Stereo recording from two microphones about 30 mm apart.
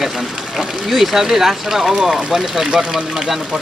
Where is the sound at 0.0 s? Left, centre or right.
Centre.